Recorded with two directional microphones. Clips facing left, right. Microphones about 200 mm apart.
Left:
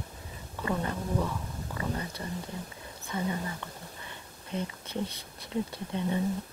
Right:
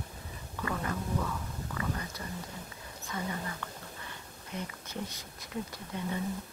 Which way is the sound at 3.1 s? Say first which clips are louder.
Left 5 dB; 20° left (ahead or behind).